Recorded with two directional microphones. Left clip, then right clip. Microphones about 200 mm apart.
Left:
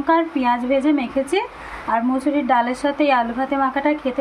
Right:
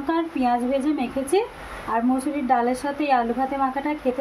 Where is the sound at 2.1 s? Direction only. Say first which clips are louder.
Left 4 dB; 10° left (ahead or behind).